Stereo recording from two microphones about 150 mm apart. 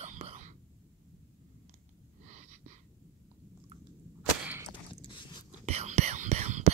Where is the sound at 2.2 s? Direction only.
55° right (ahead or behind).